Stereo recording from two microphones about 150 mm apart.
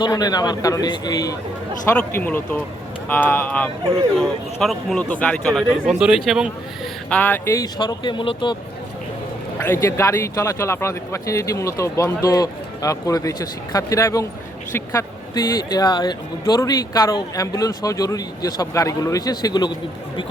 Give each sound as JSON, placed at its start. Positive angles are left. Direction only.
{"t": 0.0, "sound": "speech", "side_deg": 25}
{"t": 2.0, "sound": "a man's voice", "side_deg": 10}
{"t": 4.2, "sound": "a man's voice", "side_deg": 0}
{"t": 5.5, "sound": "speech", "side_deg": -5}
{"t": 7.1, "sound": "speech", "side_deg": 15}
{"t": 9.6, "sound": "speech", "side_deg": 20}
{"t": 15.7, "sound": "speech", "side_deg": 30}